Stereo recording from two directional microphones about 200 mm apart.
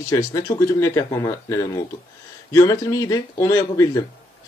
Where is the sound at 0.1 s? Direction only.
15° left (ahead or behind).